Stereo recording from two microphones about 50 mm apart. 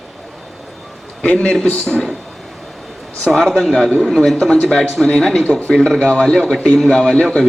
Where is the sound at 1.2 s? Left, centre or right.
Left.